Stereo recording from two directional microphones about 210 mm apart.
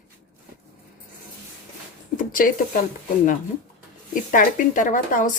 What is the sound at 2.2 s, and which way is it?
Speech, 40° left (ahead or behind).